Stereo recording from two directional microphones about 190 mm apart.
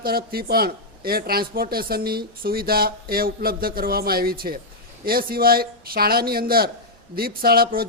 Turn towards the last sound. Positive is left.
turn(degrees=-50)  # may be behind; listen again after turning